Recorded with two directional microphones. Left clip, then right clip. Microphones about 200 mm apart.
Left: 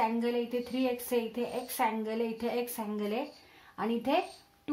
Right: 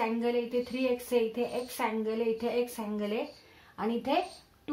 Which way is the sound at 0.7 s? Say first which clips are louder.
Right 2 dB; 40° left (ahead or behind).